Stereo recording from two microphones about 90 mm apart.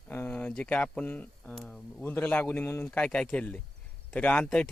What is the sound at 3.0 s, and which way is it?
Speech, 10° left (ahead or behind).